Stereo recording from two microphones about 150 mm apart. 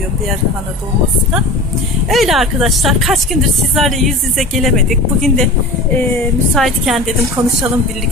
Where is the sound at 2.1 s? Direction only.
Centre (ahead or behind).